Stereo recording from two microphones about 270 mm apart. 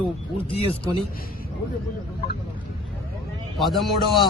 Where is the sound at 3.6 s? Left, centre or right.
Centre.